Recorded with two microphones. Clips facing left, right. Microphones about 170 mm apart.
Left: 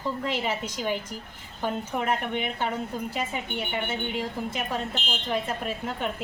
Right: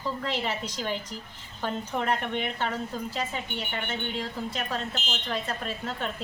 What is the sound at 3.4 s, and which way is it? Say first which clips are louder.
Speech: left 3 dB; 55° left (ahead or behind).